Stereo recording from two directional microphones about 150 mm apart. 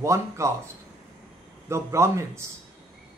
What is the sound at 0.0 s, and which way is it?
Speech, 20° right (ahead or behind).